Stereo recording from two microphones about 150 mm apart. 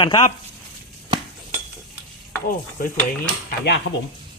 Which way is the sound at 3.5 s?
90° left.